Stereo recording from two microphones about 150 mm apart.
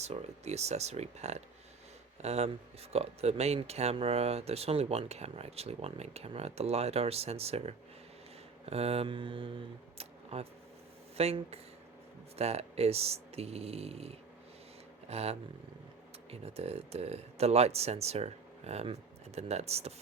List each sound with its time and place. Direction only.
0.0 s speech: 45° right (ahead or behind)
8.6 s mantra: 40° right (ahead or behind)
10.0 s a sound: 45° right (ahead or behind)
11.2 s speech: 45° right (ahead or behind)